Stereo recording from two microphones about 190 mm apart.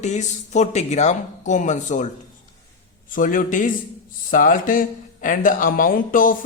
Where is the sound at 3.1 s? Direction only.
45° left (ahead or behind).